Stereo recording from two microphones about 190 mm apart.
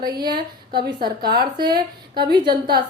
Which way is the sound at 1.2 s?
50° right (ahead or behind).